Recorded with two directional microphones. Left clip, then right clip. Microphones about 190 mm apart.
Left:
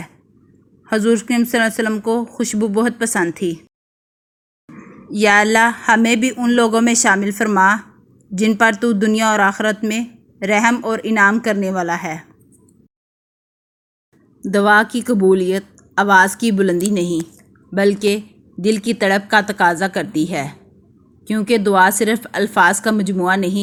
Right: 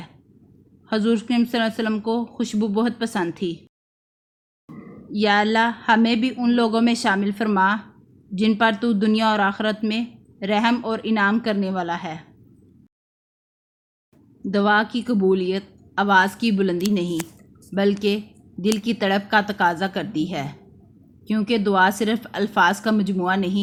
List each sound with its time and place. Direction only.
1.0 s speech: 15° left (ahead or behind)
5.1 s speech: 25° left (ahead or behind)
14.5 s speech: 25° left (ahead or behind)